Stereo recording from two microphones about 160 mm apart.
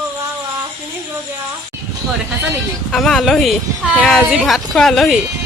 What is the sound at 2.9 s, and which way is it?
A woman's voice, 5° left (ahead or behind).